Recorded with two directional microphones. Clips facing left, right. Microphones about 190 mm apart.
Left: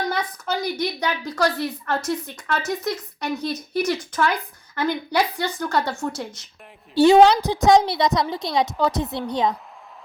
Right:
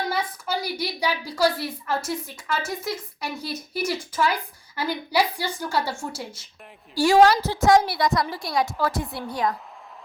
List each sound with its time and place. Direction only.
0.1 s a woman's voice: 5° right (ahead or behind)
6.9 s a woman's voice: 20° left (ahead or behind)